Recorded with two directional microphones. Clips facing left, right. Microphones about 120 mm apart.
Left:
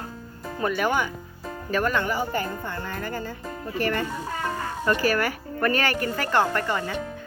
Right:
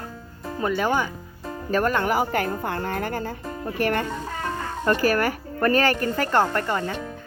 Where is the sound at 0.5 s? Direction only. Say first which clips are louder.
Right 1 dB; 25° right (ahead or behind).